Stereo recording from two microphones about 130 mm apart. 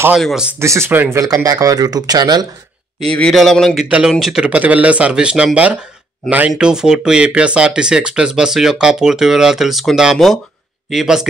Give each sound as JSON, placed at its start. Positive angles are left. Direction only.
{"t": 0.1, "sound": "speech", "side_deg": -5}
{"t": 0.6, "sound": "speech", "side_deg": -20}
{"t": 1.2, "sound": "speech", "side_deg": -30}
{"t": 3.1, "sound": "speech", "side_deg": 5}